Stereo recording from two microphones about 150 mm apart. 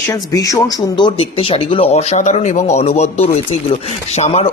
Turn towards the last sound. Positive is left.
turn(degrees=45)  # may be behind; listen again after turning